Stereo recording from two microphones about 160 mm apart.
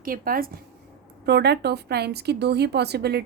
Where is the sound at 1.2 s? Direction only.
90° right.